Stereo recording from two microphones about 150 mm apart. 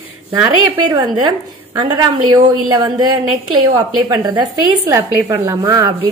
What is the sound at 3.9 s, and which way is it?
A woman's voice, 25° right (ahead or behind).